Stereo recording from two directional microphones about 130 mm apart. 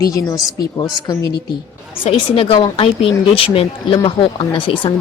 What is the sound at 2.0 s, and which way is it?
Speech, 45° left (ahead or behind).